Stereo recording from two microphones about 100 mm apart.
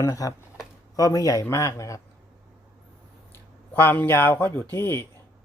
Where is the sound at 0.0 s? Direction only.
35° left (ahead or behind).